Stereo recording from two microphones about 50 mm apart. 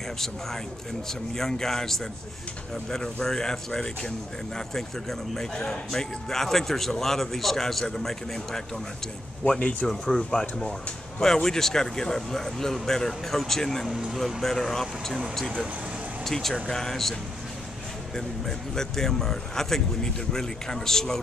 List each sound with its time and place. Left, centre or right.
1.3 s speech: centre
5.3 s speech: centre
9.4 s speech: centre
9.8 s speech: centre
13.8 s speech: centre
14.2 s speech: centre
16.3 s speech: centre
18.1 s speech: centre